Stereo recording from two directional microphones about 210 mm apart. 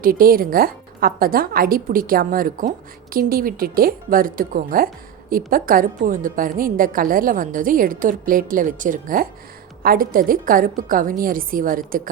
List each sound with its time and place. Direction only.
0.0 s a woman's voice: 45° right (ahead or behind)